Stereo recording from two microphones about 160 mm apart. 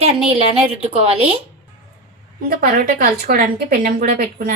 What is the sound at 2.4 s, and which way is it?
A woman's voice, 65° right (ahead or behind).